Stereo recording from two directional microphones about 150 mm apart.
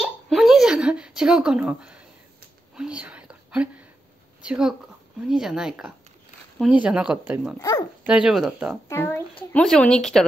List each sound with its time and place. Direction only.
0.0 s a sound: centre (ahead or behind)
2.7 s whispering: 5° right (ahead or behind)
4.4 s speech: 5° right (ahead or behind)
8.8 s speech: 15° left (ahead or behind)